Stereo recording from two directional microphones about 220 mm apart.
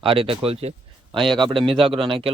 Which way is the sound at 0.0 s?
25° right (ahead or behind).